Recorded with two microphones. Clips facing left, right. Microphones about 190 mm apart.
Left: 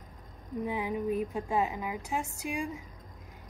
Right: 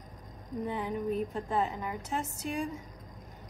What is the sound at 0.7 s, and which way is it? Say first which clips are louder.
A woman's voice: left 1 dB; 10° left (ahead or behind).